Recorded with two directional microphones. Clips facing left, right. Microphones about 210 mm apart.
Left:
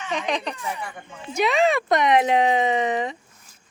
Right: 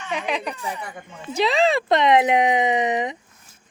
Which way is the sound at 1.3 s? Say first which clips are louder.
Right 1 dB; 30° right (ahead or behind).